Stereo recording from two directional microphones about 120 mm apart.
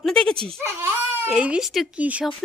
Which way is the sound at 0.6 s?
20° right (ahead or behind).